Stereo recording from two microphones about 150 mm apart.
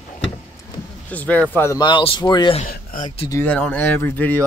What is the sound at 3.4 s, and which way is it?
Speech, 10° left (ahead or behind).